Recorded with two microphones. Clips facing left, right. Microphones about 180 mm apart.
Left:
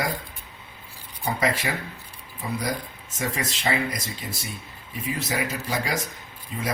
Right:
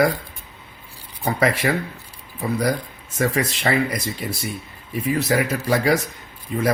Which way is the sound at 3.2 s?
65° right (ahead or behind).